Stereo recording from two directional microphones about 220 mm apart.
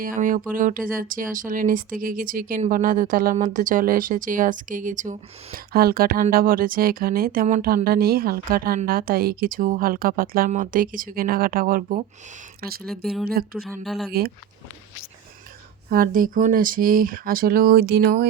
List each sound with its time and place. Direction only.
0.0 s speech: 40° right (ahead or behind)
12.8 s speech: centre (ahead or behind)
14.1 s speech: 45° right (ahead or behind)
15.9 s speech: 40° right (ahead or behind)